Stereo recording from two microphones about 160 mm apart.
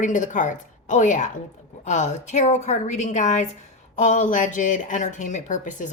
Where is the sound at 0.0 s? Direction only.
55° left (ahead or behind).